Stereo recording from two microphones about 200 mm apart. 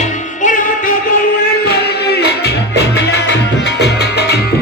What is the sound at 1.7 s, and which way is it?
Music, 55° left (ahead or behind).